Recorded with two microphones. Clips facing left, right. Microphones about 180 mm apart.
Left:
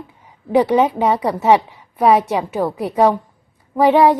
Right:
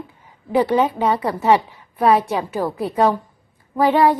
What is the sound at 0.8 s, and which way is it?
Speech, 25° left (ahead or behind).